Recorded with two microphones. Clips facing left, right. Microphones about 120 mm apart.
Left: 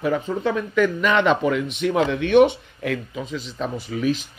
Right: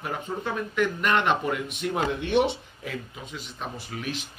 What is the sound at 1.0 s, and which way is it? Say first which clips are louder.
Speech: left 4 dB; 90° left.